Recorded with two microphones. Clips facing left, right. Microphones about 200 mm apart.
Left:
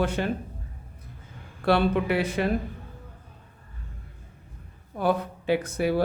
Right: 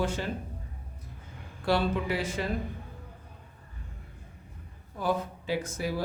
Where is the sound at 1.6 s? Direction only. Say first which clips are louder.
Left 5 dB; 60° left (ahead or behind).